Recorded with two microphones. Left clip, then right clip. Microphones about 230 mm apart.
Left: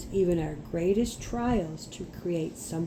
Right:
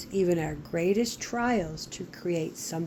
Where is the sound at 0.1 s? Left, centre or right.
Right.